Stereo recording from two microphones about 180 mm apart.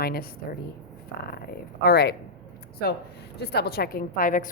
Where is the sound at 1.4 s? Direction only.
60° left (ahead or behind).